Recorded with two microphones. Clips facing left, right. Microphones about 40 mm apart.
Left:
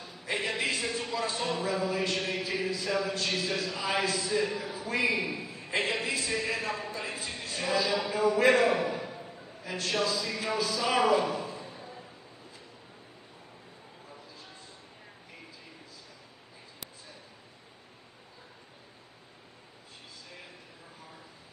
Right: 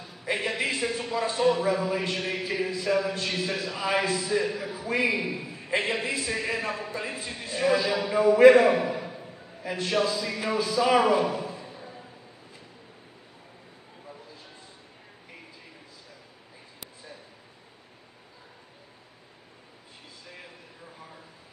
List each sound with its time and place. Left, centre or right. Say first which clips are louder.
0.2 s a sound: right 3 dB; centre
1.6 s speech: right 4 dB; centre
3.8 s a man's voice: right 5 dB; right
4.1 s a man's voice: right 3 dB; centre
8.5 s a sound: right 5 dB; centre
9.6 s a man's voice: right 4 dB; centre